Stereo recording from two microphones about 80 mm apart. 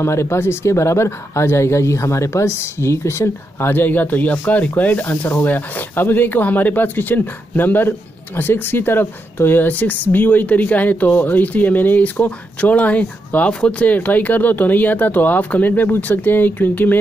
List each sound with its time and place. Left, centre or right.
0.0 s a woman's voice: left